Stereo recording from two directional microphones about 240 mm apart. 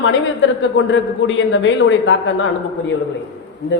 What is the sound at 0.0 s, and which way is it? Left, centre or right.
A man's voice, left.